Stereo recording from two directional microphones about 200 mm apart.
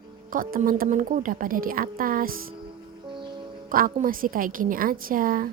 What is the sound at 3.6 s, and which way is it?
A woman's voice, 45° right (ahead or behind).